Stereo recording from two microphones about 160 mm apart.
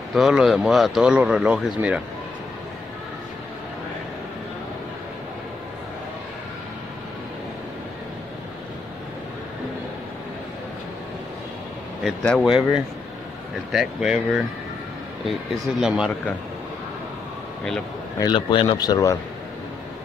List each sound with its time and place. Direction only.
0.1 s speech: 5° right (ahead or behind)
12.0 s speech: 5° left (ahead or behind)
18.2 s speech: 30° left (ahead or behind)